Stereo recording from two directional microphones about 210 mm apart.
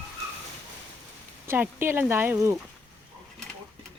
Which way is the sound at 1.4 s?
10° right (ahead or behind).